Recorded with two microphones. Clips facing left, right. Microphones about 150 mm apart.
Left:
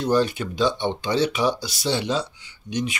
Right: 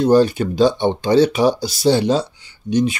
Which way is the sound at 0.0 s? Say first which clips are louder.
Right 8 dB; 35° right (ahead or behind).